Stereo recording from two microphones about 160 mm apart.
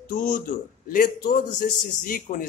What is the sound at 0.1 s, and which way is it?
A man's voice, 55° left (ahead or behind).